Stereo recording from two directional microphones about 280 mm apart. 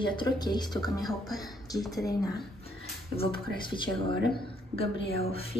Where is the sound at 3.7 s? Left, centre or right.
Centre.